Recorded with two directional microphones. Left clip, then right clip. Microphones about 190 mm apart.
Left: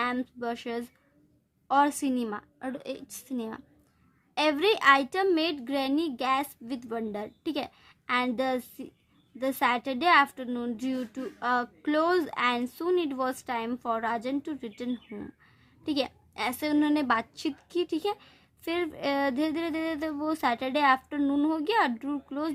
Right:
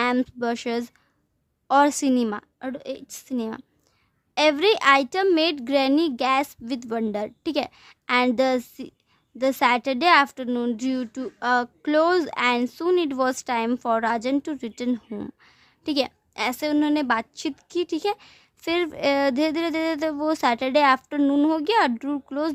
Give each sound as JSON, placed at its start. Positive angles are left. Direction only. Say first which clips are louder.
{"t": 0.0, "sound": "a woman's voice", "louder": "right 7 dB", "side_deg": -35}